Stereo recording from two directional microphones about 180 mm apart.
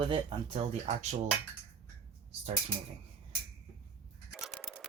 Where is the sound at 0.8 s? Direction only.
35° right (ahead or behind).